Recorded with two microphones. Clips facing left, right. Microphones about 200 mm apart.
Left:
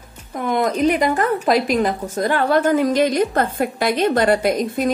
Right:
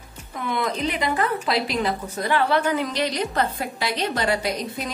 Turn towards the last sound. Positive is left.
turn(degrees=55)  # may be behind; listen again after turning